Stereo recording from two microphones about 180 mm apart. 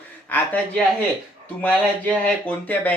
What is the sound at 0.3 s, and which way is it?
Speech, 10° left (ahead or behind).